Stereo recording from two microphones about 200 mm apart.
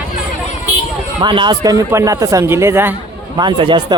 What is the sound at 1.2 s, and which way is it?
A man's voice, 25° right (ahead or behind).